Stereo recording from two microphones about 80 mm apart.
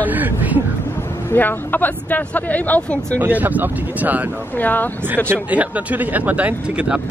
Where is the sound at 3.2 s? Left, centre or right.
Right.